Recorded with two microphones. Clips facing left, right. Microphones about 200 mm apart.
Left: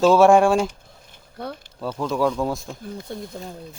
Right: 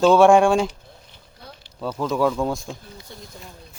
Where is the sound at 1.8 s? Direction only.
Centre (ahead or behind).